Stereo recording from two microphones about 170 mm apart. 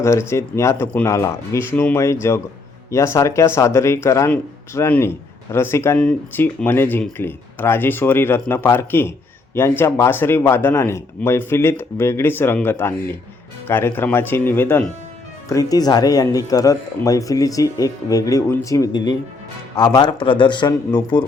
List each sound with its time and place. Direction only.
0.0 s speech: 15° left (ahead or behind)